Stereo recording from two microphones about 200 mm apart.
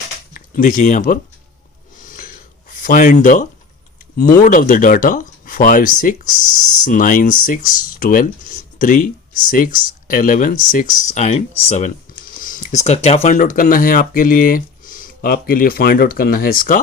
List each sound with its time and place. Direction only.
0.3 s speech: 40° left (ahead or behind)
2.0 s a sound: 40° left (ahead or behind)
4.4 s speech: 40° left (ahead or behind)